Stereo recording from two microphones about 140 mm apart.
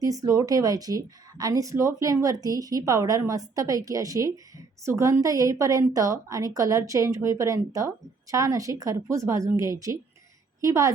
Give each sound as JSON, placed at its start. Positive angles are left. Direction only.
{"t": 0.0, "sound": "a woman's voice", "side_deg": -25}